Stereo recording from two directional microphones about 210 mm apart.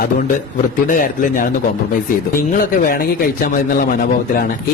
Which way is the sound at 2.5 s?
40° left (ahead or behind).